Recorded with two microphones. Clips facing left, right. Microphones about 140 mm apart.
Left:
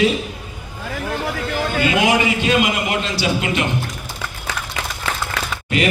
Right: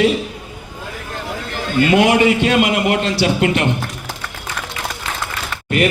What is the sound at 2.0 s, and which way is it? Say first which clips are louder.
A man's voice: right 3 dB; 65° right (ahead or behind).